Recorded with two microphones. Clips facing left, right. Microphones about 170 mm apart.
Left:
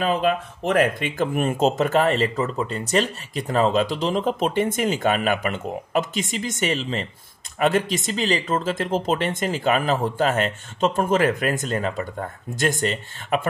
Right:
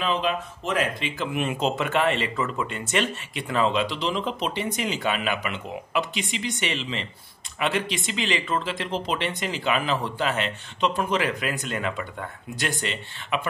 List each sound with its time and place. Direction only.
0.0 s speech: 50° left (ahead or behind)